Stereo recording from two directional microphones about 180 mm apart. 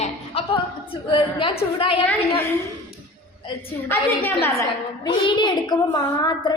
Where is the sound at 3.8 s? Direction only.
10° left (ahead or behind).